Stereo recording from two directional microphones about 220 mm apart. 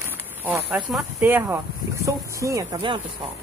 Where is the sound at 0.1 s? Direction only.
10° right (ahead or behind).